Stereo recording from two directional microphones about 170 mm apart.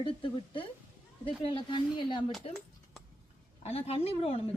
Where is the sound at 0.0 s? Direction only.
30° left (ahead or behind).